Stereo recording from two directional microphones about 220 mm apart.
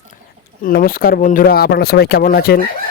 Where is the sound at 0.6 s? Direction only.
40° left (ahead or behind).